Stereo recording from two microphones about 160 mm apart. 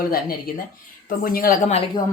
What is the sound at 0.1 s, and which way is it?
A woman's voice, 65° left (ahead or behind).